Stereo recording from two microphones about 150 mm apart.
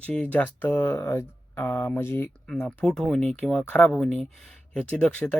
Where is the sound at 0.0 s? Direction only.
10° left (ahead or behind).